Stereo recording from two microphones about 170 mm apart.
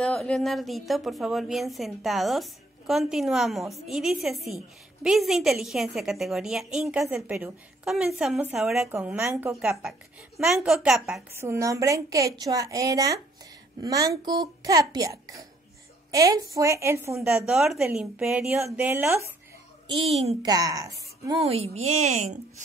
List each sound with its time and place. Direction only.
0.0 s a woman's voice: 5° left (ahead or behind)
8.9 s a woman's voice: 15° right (ahead or behind)
9.5 s a woman's voice: 5° right (ahead or behind)
11.3 s a woman's voice: 15° right (ahead or behind)
17.5 s a woman's voice: 5° right (ahead or behind)
19.9 s a woman's voice: 35° right (ahead or behind)
20.4 s a woman's voice: 20° right (ahead or behind)
21.4 s a woman's voice: 35° right (ahead or behind)